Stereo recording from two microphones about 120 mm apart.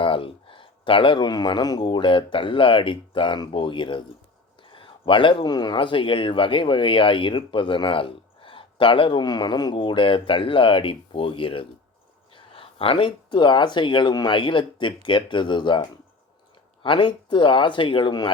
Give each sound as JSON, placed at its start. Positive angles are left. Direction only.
{"t": 0.0, "sound": "speech", "side_deg": 45}